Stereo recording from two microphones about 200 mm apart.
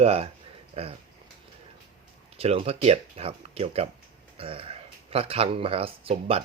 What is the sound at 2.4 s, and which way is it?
Speech, 30° right (ahead or behind).